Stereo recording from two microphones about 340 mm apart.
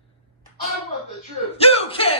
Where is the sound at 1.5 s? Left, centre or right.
Centre.